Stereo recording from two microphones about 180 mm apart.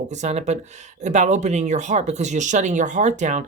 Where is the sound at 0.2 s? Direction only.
35° right (ahead or behind).